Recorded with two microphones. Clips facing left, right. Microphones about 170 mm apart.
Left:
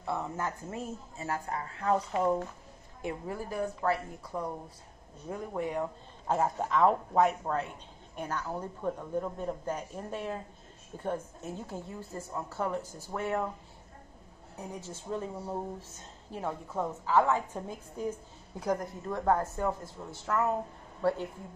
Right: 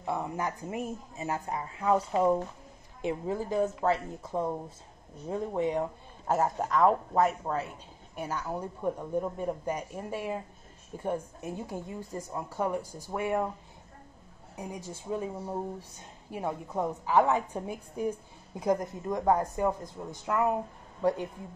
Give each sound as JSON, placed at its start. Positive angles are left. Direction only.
{"t": 0.0, "sound": "a woman's voice", "side_deg": -15}
{"t": 6.2, "sound": "a woman's voice", "side_deg": -5}
{"t": 14.6, "sound": "a woman's voice", "side_deg": -10}